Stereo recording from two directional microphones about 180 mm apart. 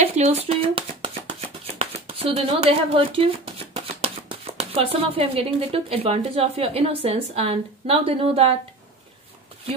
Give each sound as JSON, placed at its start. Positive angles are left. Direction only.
{"t": 0.0, "sound": "speech", "side_deg": -35}